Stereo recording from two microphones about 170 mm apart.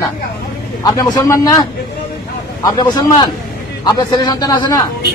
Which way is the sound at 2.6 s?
20° left (ahead or behind).